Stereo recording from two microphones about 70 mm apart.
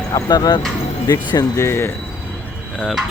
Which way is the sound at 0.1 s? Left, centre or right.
Left.